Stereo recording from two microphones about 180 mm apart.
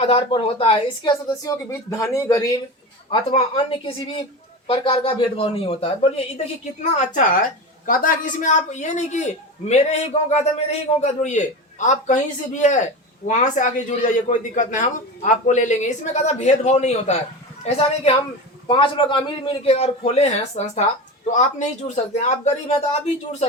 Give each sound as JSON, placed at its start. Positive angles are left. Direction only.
{"t": 0.0, "sound": "a man's voice", "side_deg": 30}
{"t": 1.3, "sound": "speech", "side_deg": 15}
{"t": 3.1, "sound": "a woman's voice", "side_deg": 30}
{"t": 7.9, "sound": "a woman's voice", "side_deg": 50}